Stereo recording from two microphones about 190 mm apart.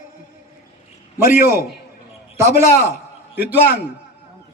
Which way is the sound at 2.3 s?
15° right (ahead or behind).